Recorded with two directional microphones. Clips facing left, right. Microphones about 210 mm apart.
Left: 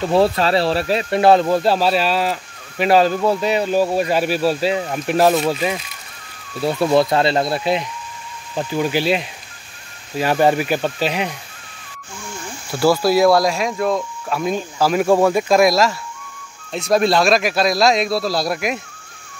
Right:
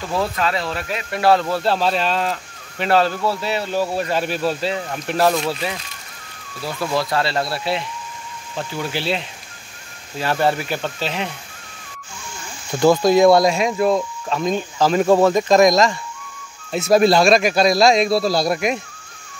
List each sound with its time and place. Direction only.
0.0 s speech: 30° left (ahead or behind)
1.2 s speech: 20° left (ahead or behind)
6.6 s speech: 25° left (ahead or behind)
12.9 s speech: 5° left (ahead or behind)
14.3 s speech: 10° left (ahead or behind)